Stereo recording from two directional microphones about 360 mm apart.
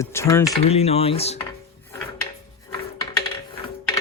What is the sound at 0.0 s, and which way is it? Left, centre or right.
Speech, centre.